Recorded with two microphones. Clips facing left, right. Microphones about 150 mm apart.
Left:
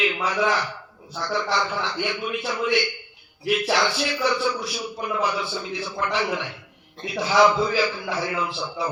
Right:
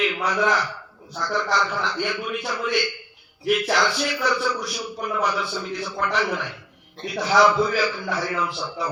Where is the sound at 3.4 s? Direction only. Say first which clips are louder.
Right 1 dB; 25° left (ahead or behind).